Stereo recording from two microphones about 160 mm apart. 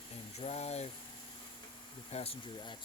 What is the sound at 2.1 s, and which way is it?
Speech, 40° left (ahead or behind).